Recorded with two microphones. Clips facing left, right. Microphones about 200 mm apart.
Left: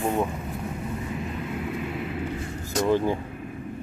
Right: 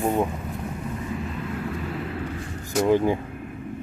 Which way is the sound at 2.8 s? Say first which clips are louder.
Right 3 dB; 15° right (ahead or behind).